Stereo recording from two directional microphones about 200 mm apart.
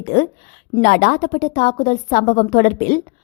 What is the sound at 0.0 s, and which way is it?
A woman's voice, 45° left (ahead or behind).